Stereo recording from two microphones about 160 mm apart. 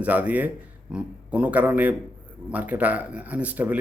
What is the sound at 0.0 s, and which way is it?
Speech, 10° right (ahead or behind).